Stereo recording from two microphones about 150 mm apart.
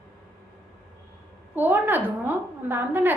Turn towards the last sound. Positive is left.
turn(degrees=-15)  # may be behind; listen again after turning